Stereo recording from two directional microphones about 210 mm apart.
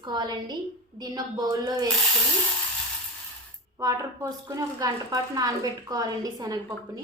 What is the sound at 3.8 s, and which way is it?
Speech, 15° right (ahead or behind).